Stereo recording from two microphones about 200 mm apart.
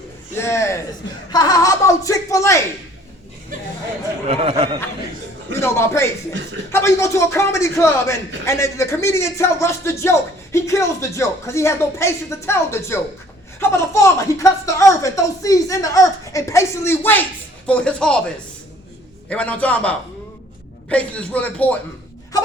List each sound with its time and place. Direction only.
0.3 s a man's voice: 15° left (ahead or behind)
4.3 s speech: 30° right (ahead or behind)
5.5 s speech: 10° left (ahead or behind)
19.3 s speech: 5° left (ahead or behind)